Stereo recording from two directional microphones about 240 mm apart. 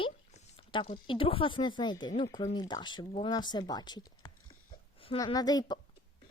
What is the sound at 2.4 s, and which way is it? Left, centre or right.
Speech, centre.